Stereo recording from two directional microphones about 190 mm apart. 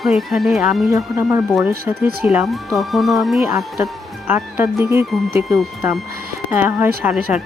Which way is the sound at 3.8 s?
10° right (ahead or behind).